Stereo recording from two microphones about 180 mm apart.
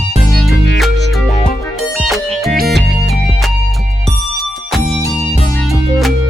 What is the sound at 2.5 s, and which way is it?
Music, 60° right (ahead or behind).